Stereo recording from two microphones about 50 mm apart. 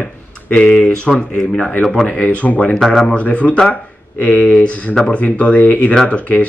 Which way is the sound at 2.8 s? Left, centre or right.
Centre.